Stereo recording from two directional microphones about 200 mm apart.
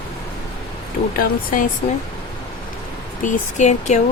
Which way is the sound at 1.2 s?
45° left (ahead or behind).